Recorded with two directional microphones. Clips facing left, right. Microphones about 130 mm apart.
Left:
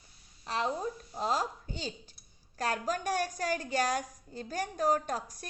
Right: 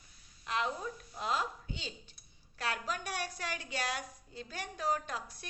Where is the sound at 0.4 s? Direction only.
35° left (ahead or behind).